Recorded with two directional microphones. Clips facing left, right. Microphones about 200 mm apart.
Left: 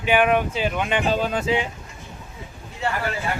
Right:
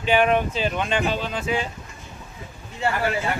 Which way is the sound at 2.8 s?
Centre (ahead or behind).